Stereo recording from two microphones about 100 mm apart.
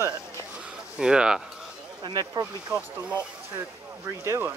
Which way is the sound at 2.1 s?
45° right (ahead or behind).